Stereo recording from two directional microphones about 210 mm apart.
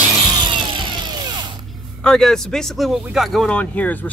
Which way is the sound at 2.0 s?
Centre (ahead or behind).